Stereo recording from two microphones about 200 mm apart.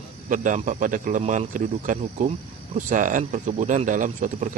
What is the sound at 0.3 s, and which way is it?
Speech, 40° right (ahead or behind).